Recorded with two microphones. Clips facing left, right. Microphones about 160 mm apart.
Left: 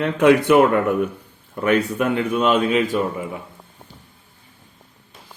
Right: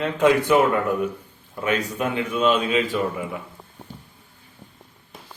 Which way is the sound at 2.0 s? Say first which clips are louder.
Left 3 dB; 60° left (ahead or behind).